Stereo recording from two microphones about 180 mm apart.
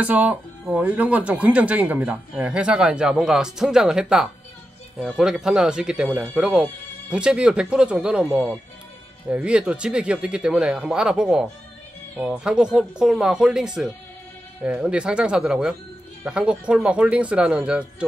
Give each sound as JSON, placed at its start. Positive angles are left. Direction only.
{"t": 0.0, "sound": "speech", "side_deg": -10}